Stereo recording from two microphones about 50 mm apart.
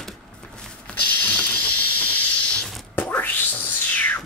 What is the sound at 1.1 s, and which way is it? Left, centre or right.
Hiss, left.